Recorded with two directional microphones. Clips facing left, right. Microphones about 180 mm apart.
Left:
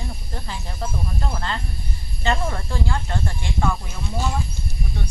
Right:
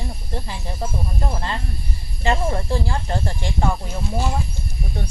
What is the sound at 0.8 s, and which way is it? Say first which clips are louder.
Speech: right 2 dB; 20° right (ahead or behind).